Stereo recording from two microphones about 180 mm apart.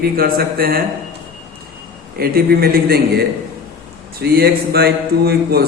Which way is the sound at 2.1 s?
55° right (ahead or behind).